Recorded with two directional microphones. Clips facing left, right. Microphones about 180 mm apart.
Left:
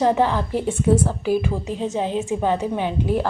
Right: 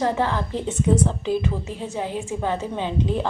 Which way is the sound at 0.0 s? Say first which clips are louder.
Left 4 dB; 15° left (ahead or behind).